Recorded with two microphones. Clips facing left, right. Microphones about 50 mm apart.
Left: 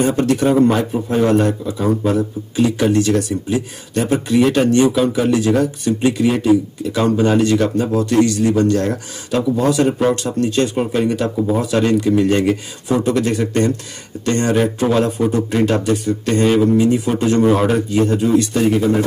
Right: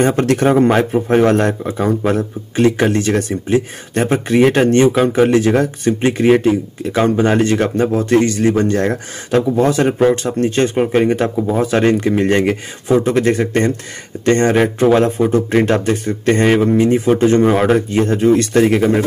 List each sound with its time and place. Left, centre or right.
0.0 s speech: right
1.7 s speech: right